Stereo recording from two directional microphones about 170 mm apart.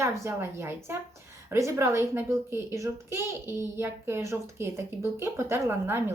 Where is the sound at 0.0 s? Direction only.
15° right (ahead or behind).